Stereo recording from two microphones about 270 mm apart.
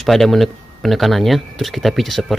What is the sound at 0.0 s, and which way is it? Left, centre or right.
Speech, centre.